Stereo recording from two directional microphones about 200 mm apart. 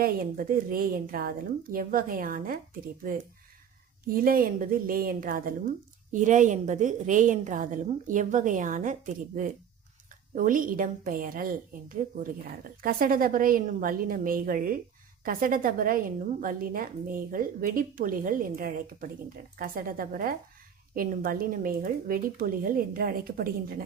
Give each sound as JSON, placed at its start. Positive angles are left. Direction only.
{"t": 0.0, "sound": "a woman's voice", "side_deg": -45}
{"t": 4.1, "sound": "a woman's voice", "side_deg": -45}